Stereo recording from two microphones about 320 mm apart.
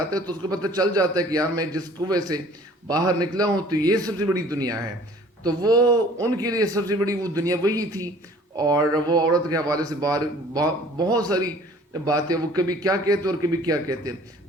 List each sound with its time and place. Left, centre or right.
0.1 s speech: centre